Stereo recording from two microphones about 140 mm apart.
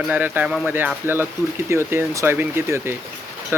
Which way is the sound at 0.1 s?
15° right (ahead or behind).